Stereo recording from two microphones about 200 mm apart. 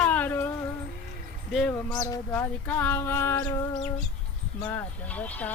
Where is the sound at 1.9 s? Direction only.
20° left (ahead or behind).